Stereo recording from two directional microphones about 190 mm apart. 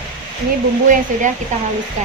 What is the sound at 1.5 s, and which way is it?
Speech, 40° right (ahead or behind).